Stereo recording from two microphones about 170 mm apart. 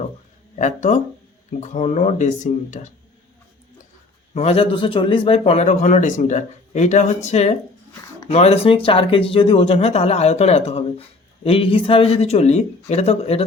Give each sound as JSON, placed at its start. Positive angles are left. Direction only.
{"t": 0.6, "sound": "speech", "side_deg": 45}
{"t": 4.4, "sound": "a man's voice", "side_deg": 35}